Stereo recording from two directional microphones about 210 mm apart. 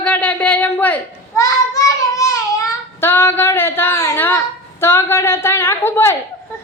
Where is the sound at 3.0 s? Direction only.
10° left (ahead or behind).